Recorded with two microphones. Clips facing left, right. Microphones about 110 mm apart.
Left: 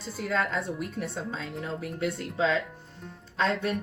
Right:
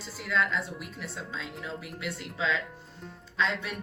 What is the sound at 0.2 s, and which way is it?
A woman's voice, 45° left (ahead or behind).